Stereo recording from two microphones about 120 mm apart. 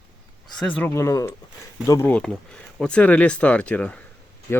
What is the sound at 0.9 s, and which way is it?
Speech, 25° left (ahead or behind).